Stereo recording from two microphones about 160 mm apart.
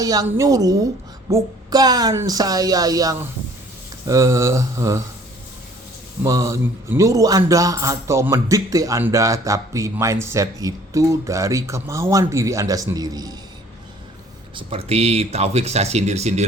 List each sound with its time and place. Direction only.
0.0 s speech: 25° right (ahead or behind)
6.2 s speech: 20° right (ahead or behind)
14.5 s speech: 35° right (ahead or behind)